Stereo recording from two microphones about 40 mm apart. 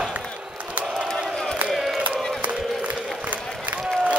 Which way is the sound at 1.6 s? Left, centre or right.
Right.